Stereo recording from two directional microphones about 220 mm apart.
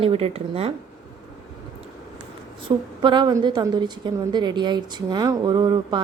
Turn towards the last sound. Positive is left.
turn(degrees=-20)  # may be behind; listen again after turning